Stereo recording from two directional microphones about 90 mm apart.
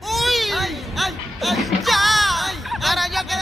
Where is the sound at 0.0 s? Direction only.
Centre (ahead or behind).